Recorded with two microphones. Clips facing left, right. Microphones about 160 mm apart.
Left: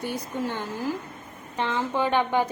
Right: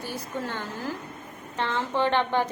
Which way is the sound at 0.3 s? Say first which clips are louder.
Left 2 dB; 15° left (ahead or behind).